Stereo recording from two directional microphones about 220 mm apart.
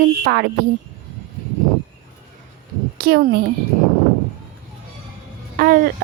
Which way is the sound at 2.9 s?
45° right (ahead or behind).